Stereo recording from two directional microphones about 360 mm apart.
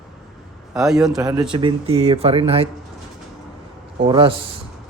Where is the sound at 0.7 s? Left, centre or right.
Centre.